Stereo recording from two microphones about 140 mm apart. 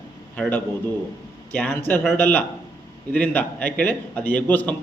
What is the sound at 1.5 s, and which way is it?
A man's voice, 10° left (ahead or behind).